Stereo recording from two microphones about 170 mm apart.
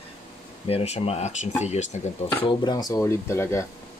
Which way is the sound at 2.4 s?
25° left (ahead or behind).